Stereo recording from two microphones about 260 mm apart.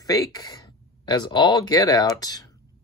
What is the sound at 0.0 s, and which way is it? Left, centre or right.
Speech, centre.